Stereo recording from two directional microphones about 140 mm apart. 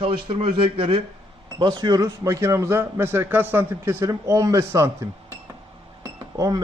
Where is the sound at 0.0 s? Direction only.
40° right (ahead or behind).